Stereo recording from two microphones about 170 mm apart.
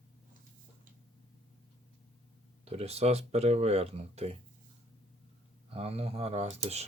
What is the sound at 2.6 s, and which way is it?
Speech, 35° right (ahead or behind).